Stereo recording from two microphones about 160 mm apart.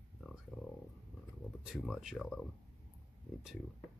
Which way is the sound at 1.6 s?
Centre (ahead or behind).